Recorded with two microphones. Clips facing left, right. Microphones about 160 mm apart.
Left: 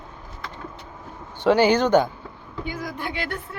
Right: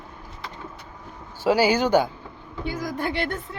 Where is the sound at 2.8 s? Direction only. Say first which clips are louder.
Right 6 dB; 45° right (ahead or behind).